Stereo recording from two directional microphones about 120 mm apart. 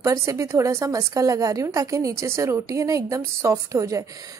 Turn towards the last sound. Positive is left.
turn(degrees=-25)  # may be behind; listen again after turning